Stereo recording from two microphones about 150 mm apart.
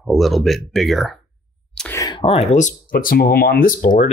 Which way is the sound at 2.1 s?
40° left (ahead or behind).